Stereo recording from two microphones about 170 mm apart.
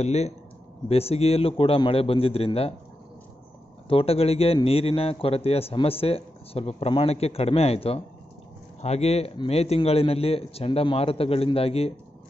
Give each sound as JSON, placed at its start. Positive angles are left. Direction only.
{"t": 0.0, "sound": "a man's voice", "side_deg": 40}
{"t": 3.9, "sound": "a man's voice", "side_deg": 35}